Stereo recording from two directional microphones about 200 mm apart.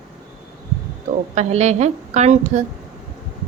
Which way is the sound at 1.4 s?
35° right (ahead or behind).